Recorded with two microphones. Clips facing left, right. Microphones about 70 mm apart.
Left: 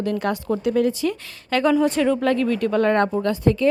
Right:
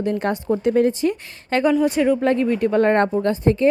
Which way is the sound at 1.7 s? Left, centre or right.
Centre.